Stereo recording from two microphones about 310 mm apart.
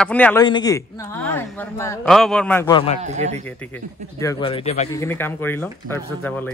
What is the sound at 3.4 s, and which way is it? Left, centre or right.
Speech, centre.